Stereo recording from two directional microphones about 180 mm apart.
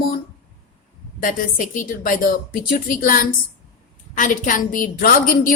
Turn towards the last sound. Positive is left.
turn(degrees=50)  # may be behind; listen again after turning